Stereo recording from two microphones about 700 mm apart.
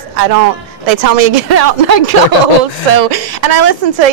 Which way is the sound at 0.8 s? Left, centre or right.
Right.